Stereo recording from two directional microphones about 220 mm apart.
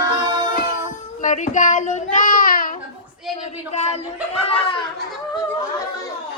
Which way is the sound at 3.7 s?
30° left (ahead or behind).